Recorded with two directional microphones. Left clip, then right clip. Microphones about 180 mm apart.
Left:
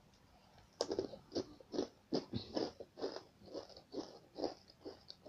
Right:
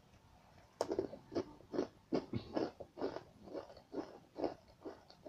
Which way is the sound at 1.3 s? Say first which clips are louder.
Right 1 dB; 15° left (ahead or behind).